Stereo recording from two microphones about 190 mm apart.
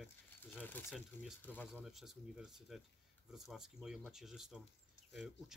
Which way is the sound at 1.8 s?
Centre (ahead or behind).